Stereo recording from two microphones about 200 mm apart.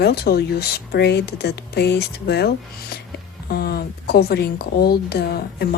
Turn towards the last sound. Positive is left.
turn(degrees=50)  # may be behind; listen again after turning